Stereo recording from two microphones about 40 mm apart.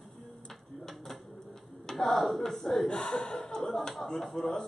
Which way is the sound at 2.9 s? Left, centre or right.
Left.